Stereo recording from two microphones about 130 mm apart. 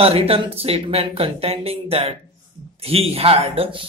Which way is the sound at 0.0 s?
50° right (ahead or behind).